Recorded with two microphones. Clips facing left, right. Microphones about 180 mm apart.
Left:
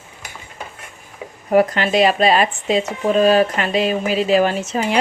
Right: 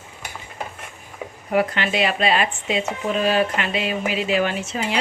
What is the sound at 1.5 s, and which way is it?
Speech, 40° left (ahead or behind).